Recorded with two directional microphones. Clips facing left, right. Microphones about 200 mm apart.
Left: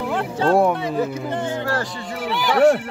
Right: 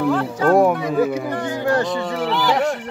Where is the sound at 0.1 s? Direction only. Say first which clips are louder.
Left 1 dB; 30° left (ahead or behind).